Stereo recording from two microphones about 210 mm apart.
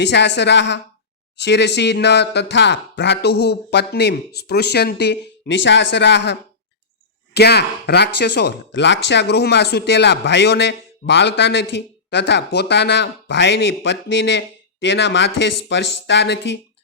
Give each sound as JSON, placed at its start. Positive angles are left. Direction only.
{"t": 0.0, "sound": "speech", "side_deg": 55}
{"t": 7.3, "sound": "speech", "side_deg": 50}